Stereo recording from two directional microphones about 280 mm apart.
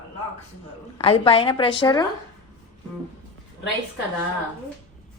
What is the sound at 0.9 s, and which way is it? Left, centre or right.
A woman's voice, left.